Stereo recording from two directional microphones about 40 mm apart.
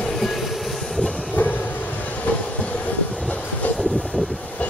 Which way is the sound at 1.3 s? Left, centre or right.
Left.